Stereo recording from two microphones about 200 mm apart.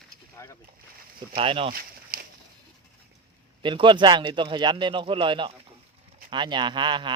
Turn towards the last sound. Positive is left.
turn(degrees=-25)  # may be behind; listen again after turning